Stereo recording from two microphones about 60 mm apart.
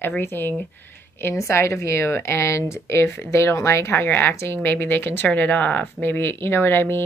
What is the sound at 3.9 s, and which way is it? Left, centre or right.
Speech, left.